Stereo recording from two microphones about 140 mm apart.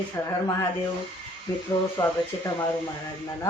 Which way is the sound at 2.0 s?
25° left (ahead or behind).